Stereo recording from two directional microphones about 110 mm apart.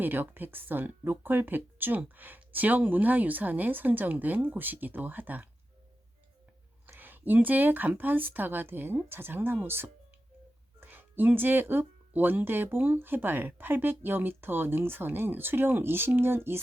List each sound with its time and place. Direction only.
0.0 s speech: 20° right (ahead or behind)
6.8 s speech: 15° right (ahead or behind)